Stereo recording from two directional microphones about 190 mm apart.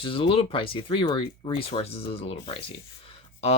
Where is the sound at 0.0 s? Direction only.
30° left (ahead or behind).